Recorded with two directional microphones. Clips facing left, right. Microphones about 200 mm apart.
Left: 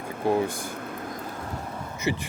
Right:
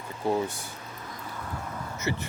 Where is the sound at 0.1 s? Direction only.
55° left (ahead or behind).